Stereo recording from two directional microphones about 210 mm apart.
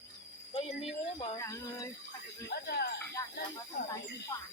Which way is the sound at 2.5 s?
50° left (ahead or behind).